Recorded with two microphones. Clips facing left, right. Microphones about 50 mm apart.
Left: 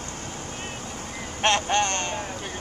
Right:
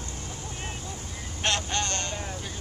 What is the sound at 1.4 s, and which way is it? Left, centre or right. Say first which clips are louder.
Vehicle: left 7 dB; left.